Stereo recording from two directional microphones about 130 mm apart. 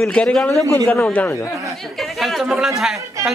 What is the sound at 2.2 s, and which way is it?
A man's voice, centre (ahead or behind).